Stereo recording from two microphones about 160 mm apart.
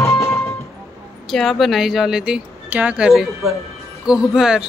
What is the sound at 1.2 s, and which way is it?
A woman's voice, centre (ahead or behind).